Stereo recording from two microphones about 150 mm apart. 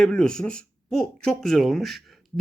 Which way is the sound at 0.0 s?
5° left (ahead or behind).